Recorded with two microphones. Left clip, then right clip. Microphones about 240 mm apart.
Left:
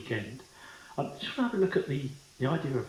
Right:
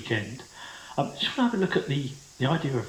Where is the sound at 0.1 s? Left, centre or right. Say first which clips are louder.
Right 6 dB; right.